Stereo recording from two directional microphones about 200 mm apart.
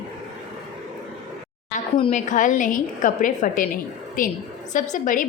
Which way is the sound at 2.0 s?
35° left (ahead or behind).